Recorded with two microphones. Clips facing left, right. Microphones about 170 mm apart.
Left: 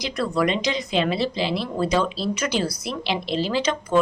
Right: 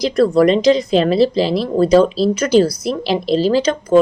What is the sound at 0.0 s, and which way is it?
A woman's voice, 35° right (ahead or behind).